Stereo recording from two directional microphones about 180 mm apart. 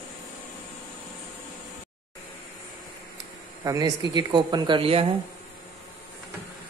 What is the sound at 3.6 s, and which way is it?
Speech, 20° right (ahead or behind).